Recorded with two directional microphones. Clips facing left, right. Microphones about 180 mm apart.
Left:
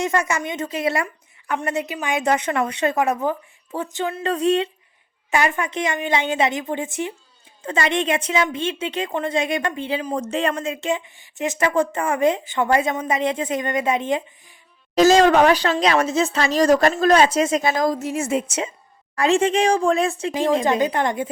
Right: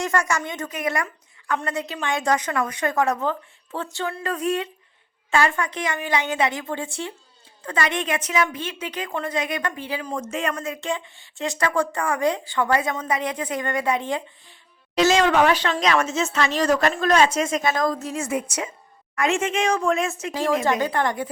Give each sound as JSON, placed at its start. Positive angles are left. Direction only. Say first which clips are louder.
{"t": 0.0, "sound": "speech", "louder": "left 2 dB", "side_deg": 20}
{"t": 5.3, "sound": "speech", "louder": "left 1 dB", "side_deg": 20}
{"t": 10.2, "sound": "speech", "louder": "left 3 dB", "side_deg": 35}
{"t": 14.9, "sound": "speech", "louder": "left 4 dB", "side_deg": 40}
{"t": 20.3, "sound": "speech", "louder": "left 2 dB", "side_deg": 20}